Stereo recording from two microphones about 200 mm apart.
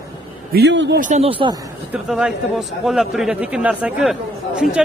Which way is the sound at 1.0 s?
30° right (ahead or behind).